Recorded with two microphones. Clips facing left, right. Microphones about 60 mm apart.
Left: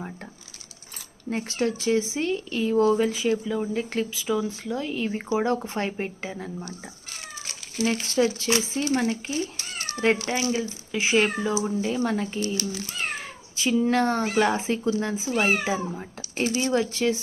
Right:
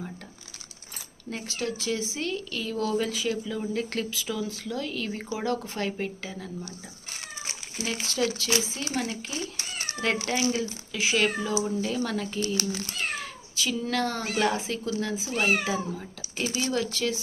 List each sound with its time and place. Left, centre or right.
1.3 s speech: left
10.2 s speech: centre